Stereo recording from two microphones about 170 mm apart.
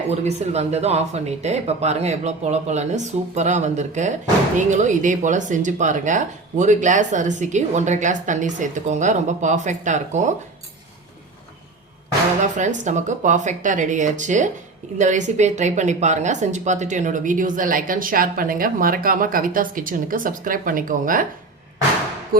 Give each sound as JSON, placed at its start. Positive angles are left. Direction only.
{"t": 0.1, "sound": "a woman's voice", "side_deg": -40}
{"t": 12.5, "sound": "a woman's voice", "side_deg": -45}